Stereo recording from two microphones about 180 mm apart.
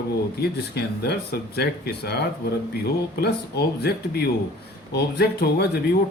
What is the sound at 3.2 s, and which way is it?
Speech, 65° left (ahead or behind).